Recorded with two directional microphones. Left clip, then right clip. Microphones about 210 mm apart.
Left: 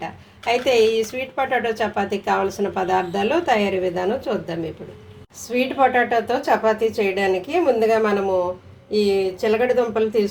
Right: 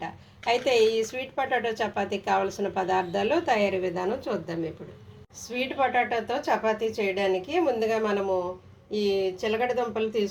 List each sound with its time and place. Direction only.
0.0 s speech: centre (ahead or behind)